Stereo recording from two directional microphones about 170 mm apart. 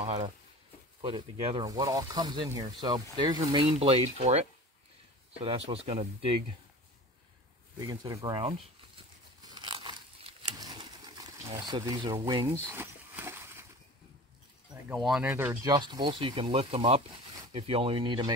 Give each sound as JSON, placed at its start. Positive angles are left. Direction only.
{"t": 0.0, "sound": "speech", "side_deg": -35}
{"t": 1.0, "sound": "speech", "side_deg": -25}
{"t": 3.6, "sound": "speech", "side_deg": -35}
{"t": 7.8, "sound": "speech", "side_deg": -20}
{"t": 8.4, "sound": "crumpling", "side_deg": -30}
{"t": 12.7, "sound": "a sound", "side_deg": -15}
{"t": 14.9, "sound": "speech", "side_deg": 0}
{"t": 15.3, "sound": "speech", "side_deg": -20}